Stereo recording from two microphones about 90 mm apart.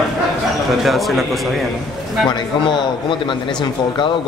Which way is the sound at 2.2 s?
60° left (ahead or behind).